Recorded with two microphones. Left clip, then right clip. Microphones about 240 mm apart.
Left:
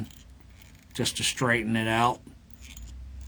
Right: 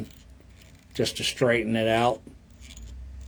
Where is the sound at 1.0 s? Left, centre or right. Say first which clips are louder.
Right 3 dB; left.